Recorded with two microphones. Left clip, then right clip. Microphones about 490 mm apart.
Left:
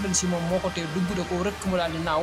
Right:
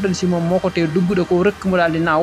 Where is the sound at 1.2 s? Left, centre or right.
Left.